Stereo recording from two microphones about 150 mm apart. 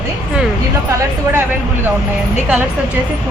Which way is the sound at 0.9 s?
15° right (ahead or behind).